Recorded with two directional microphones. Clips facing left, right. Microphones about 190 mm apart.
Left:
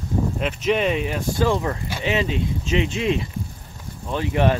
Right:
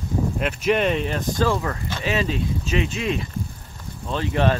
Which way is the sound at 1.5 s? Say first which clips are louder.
Left 2 dB; 20° left (ahead or behind).